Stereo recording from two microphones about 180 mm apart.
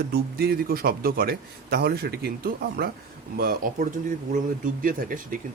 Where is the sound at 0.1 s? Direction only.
60° right (ahead or behind).